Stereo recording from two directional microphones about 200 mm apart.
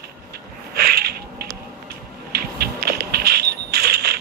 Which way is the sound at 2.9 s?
55° right (ahead or behind).